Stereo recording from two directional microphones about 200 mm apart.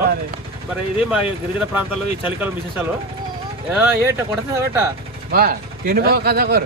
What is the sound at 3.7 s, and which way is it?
Speech, 10° right (ahead or behind).